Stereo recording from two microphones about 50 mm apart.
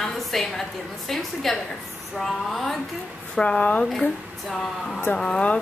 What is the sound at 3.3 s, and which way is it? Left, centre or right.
Speech, centre.